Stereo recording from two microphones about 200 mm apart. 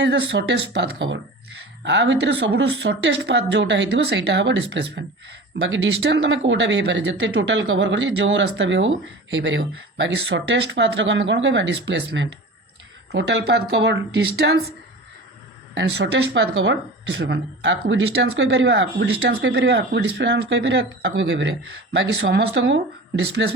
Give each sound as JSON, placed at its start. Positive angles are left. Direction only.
{"t": 0.0, "sound": "speech", "side_deg": -60}
{"t": 15.7, "sound": "speech", "side_deg": -60}